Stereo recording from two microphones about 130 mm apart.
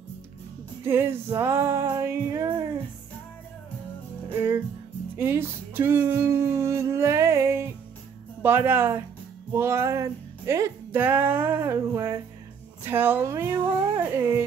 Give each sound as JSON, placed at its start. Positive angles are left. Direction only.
{"t": 0.8, "sound": "music", "side_deg": -15}
{"t": 5.1, "sound": "music", "side_deg": -15}
{"t": 8.4, "sound": "speech", "side_deg": -15}
{"t": 9.5, "sound": "music", "side_deg": -20}
{"t": 12.8, "sound": "speech", "side_deg": -15}